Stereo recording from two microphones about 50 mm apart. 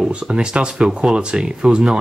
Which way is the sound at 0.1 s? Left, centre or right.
Centre.